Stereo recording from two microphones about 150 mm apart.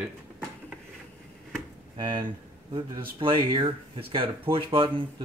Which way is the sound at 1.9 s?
30° right (ahead or behind).